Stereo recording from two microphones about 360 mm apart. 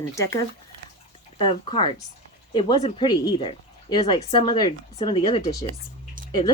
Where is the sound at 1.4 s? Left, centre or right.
Centre.